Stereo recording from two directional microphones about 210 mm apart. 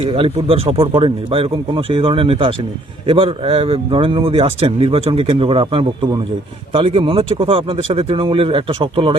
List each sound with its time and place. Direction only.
0.0 s speech: 25° right (ahead or behind)